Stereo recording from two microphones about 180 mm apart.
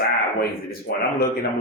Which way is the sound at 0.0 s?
60° left (ahead or behind).